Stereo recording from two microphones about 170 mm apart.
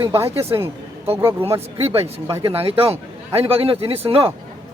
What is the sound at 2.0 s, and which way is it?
A man's voice, 35° right (ahead or behind).